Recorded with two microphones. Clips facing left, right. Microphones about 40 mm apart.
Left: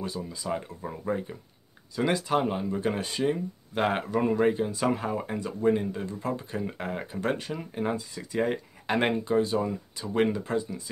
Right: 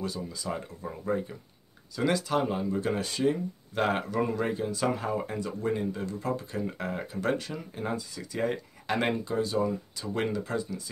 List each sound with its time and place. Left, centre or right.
0.0 s speech: left
2.0 s speech: left